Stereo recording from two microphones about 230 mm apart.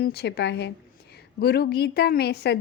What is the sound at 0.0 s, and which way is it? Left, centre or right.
A woman's voice, left.